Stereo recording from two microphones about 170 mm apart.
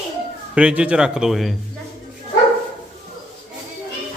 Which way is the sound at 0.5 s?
5° right (ahead or behind).